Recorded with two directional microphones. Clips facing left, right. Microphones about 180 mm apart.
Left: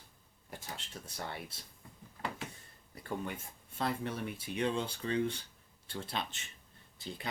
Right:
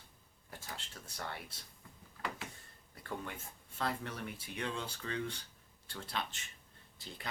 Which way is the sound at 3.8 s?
20° left (ahead or behind).